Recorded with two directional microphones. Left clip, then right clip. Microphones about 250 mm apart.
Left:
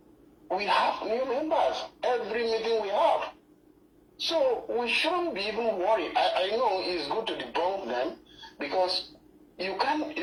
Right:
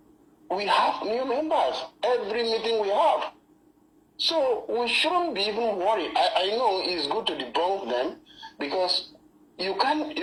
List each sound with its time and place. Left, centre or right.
0.4 s a woman's voice: right